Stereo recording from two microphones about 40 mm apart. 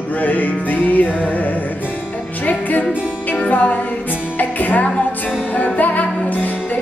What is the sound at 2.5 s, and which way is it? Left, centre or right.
Music, left.